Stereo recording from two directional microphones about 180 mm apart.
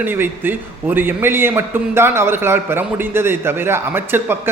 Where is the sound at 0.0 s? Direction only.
10° right (ahead or behind).